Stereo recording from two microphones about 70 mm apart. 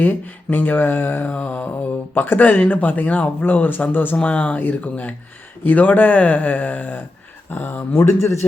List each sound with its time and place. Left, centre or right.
0.0 s mantra: left
8.0 s a man's voice: left